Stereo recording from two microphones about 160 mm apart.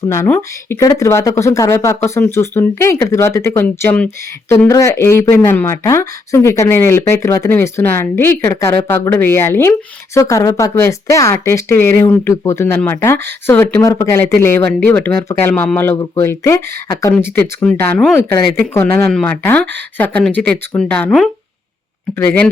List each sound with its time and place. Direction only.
0.3 s speech: 20° left (ahead or behind)